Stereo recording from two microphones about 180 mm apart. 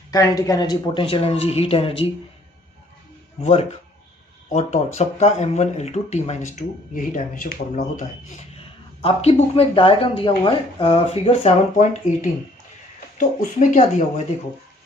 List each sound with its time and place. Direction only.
0.1 s speech: 20° left (ahead or behind)
3.4 s speech: 35° left (ahead or behind)
4.9 s speech: 40° left (ahead or behind)